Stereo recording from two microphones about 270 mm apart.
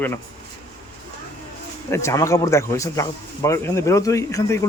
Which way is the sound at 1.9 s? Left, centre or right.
Centre.